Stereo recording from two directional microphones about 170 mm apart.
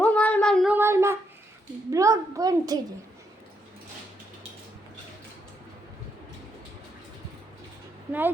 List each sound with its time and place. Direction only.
0.0 s a sound: 10° left (ahead or behind)
0.7 s child singing: 15° right (ahead or behind)
1.9 s a woman's voice: 20° right (ahead or behind)